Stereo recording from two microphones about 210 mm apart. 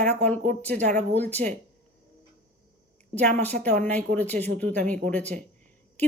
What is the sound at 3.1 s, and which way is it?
Speech, 5° left (ahead or behind).